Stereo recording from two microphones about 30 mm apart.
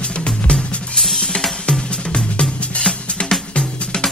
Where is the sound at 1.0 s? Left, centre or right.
Centre.